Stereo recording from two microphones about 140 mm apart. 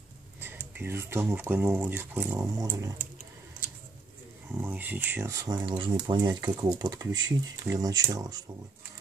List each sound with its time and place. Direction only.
0.4 s speech: 15° right (ahead or behind)
4.5 s speech: 15° right (ahead or behind)